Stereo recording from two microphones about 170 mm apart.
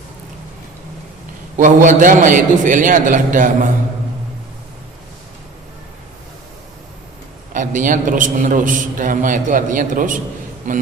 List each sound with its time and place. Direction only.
1.5 s a man's voice: 50° right (ahead or behind)
7.5 s a man's voice: 50° right (ahead or behind)